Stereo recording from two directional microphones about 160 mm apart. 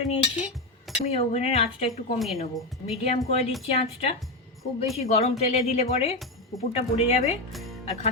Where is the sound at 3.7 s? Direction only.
40° left (ahead or behind).